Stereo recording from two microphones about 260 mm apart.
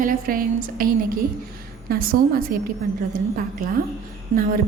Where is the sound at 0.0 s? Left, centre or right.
Right.